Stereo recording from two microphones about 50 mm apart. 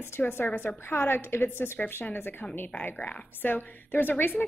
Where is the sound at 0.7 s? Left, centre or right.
Left.